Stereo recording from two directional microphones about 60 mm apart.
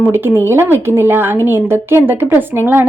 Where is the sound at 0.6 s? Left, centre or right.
Right.